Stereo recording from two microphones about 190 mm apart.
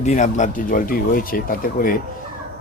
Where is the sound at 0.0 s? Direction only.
40° left (ahead or behind).